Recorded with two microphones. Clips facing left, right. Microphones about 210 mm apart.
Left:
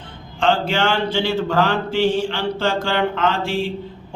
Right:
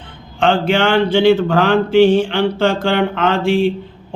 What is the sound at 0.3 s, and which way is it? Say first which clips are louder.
Speech: right 4 dB; 60° right (ahead or behind).